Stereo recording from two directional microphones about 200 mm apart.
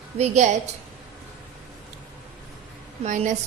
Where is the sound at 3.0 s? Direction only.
35° right (ahead or behind).